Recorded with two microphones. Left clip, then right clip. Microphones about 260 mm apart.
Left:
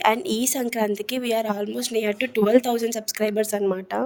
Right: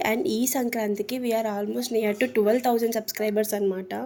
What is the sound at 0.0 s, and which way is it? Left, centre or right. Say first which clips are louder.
Speech: left 4 dB; left.